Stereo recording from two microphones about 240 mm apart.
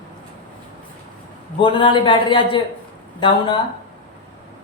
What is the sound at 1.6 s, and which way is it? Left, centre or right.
A man's voice, left.